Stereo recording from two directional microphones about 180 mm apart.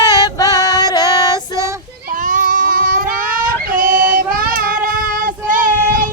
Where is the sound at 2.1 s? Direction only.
50° right (ahead or behind).